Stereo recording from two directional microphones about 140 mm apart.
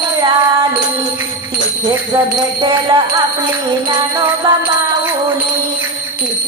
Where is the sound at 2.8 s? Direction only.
30° right (ahead or behind).